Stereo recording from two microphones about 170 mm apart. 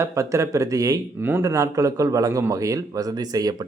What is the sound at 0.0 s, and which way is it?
A man's voice, 20° right (ahead or behind).